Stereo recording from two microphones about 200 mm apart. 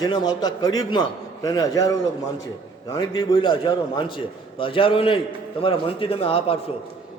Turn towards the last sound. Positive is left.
turn(degrees=30)  # may be behind; listen again after turning